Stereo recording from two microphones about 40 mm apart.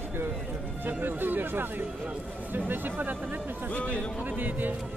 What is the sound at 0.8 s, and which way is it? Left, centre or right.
Speech, right.